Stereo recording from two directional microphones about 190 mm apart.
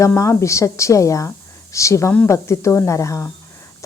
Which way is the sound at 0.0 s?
15° left (ahead or behind).